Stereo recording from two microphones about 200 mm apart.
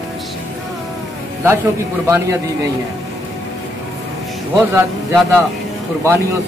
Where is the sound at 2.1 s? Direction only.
15° right (ahead or behind).